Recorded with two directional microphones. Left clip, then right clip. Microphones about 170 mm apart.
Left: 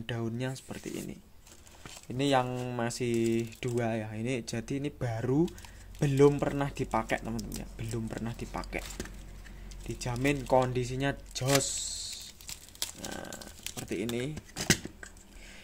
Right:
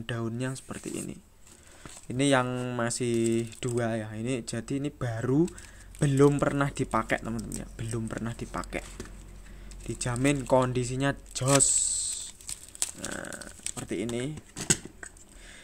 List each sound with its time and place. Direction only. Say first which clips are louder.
0.0 s speech: right 2 dB; 10° right (ahead or behind)
9.8 s speech: right 3 dB; 20° right (ahead or behind)